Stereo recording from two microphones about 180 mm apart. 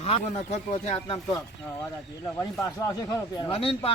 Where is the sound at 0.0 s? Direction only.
35° left (ahead or behind).